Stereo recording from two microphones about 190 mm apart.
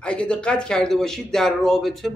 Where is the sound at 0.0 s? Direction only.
5° left (ahead or behind).